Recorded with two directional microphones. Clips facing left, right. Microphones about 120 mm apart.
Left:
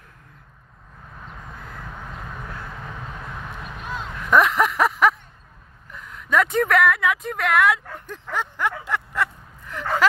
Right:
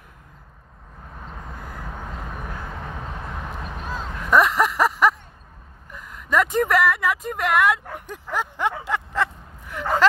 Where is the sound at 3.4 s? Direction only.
35° right (ahead or behind).